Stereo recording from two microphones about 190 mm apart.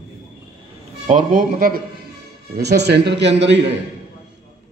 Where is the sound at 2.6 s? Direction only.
60° right (ahead or behind).